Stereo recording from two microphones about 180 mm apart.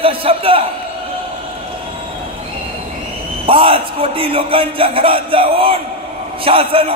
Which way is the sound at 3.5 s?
30° right (ahead or behind).